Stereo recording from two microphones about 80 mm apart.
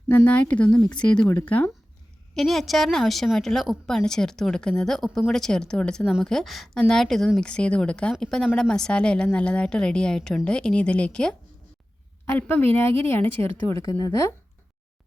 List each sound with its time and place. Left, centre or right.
0.3 s a woman's voice: centre
2.3 s a woman's voice: centre
12.2 s a woman's voice: left
13.8 s speech: left